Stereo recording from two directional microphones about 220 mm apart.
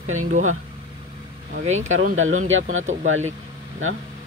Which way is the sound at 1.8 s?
65° right (ahead or behind).